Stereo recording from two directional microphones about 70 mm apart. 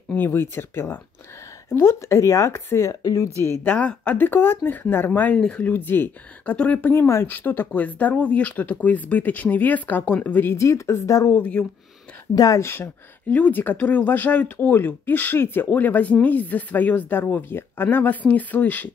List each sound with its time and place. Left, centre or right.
0.1 s speech: left
3.0 s speech: left
3.6 s speech: left
10.5 s speech: left
11.3 s speech: left
12.4 s speech: left
12.6 s speech: left